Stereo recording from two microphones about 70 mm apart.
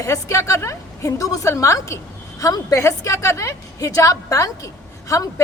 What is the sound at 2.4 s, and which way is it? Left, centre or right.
Speech, left.